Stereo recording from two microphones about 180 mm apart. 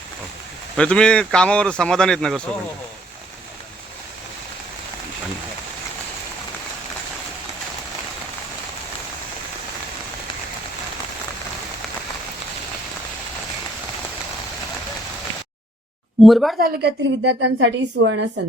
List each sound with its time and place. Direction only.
0.8 s speech: 5° left (ahead or behind)
16.2 s speech: centre (ahead or behind)
16.6 s a woman's voice: 70° right (ahead or behind); by 18.3 s 90° right